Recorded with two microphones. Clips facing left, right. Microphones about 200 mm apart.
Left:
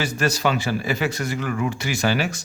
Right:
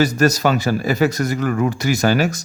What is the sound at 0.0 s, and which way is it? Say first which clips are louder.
Speech: right 7 dB; 40° right (ahead or behind).